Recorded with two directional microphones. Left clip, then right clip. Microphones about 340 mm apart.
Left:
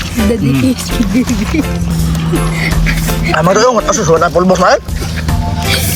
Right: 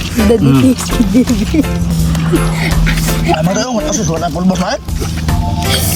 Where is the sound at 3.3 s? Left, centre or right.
Centre.